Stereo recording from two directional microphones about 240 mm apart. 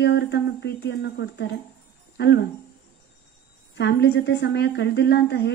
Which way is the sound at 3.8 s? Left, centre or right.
Left.